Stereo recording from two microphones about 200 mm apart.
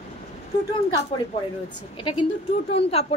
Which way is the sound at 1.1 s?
25° left (ahead or behind).